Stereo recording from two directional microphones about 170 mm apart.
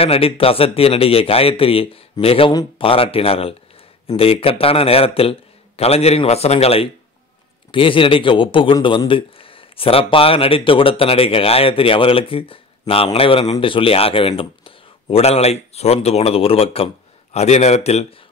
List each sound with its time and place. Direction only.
0.0 s a man's voice: 35° left (ahead or behind)